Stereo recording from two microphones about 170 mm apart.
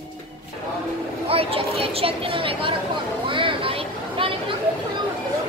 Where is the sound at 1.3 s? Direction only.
35° right (ahead or behind).